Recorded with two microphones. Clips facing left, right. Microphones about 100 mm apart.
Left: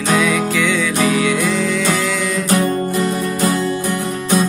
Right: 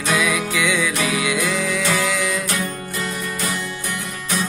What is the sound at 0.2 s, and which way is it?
Music, 5° right (ahead or behind).